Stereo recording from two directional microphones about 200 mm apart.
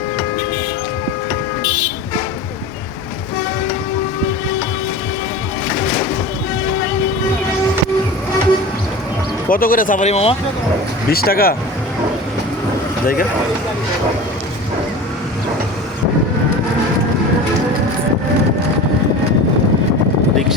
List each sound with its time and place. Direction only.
9.5 s speech: 45° left (ahead or behind)
11.1 s speech: 50° left (ahead or behind)